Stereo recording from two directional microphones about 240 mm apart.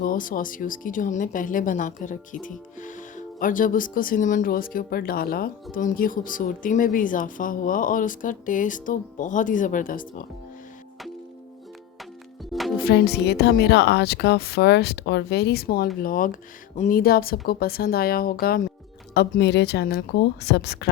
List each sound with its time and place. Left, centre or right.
0.0 s speech: left
12.8 s speech: left